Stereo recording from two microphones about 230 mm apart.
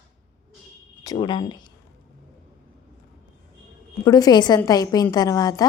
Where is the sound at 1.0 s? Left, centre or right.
Centre.